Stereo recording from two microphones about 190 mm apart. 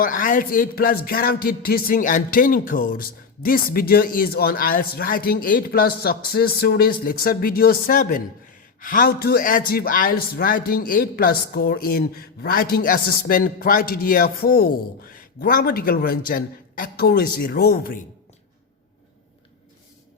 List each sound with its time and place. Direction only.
0.0 s a man's voice: 45° left (ahead or behind)